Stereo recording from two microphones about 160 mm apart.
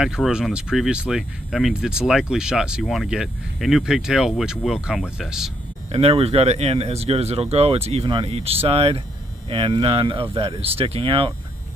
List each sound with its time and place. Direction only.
0.0 s speech: 5° right (ahead or behind)
5.9 s speech: 40° right (ahead or behind)